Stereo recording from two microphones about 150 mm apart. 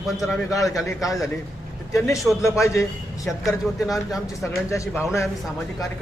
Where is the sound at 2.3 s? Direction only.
Centre (ahead or behind).